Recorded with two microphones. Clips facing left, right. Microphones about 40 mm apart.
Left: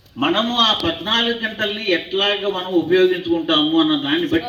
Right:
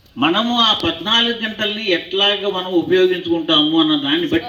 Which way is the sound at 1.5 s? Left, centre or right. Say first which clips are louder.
Right 1 dB; right.